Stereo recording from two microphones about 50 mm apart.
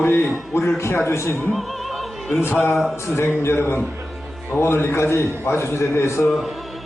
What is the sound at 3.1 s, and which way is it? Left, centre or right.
A man's voice, left.